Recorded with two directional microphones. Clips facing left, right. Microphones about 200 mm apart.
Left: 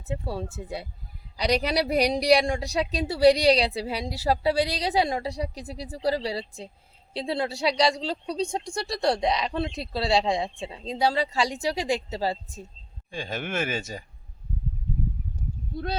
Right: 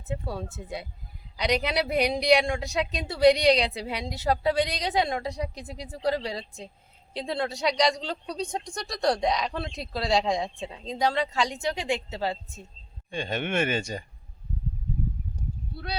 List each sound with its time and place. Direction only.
0.0 s speech: 30° left (ahead or behind)
9.5 s speech: 5° left (ahead or behind)
9.9 s speech: 30° left (ahead or behind)
13.1 s speech: centre (ahead or behind)